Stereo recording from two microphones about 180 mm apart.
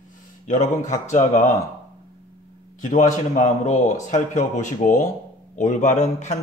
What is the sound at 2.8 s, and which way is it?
A man's voice, 45° left (ahead or behind).